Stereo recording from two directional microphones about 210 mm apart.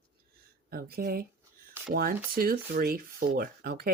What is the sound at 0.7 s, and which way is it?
Speech, 45° right (ahead or behind).